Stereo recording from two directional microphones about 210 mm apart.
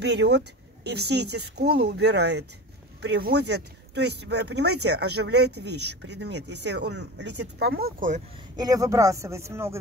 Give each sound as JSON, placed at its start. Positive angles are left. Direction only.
{"t": 0.0, "sound": "speech", "side_deg": -55}
{"t": 8.5, "sound": "speech", "side_deg": -15}